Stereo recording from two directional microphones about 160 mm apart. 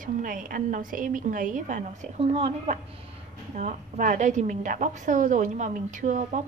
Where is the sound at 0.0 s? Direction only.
60° right (ahead or behind).